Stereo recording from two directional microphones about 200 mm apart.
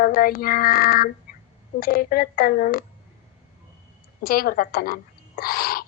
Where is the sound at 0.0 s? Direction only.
45° left (ahead or behind).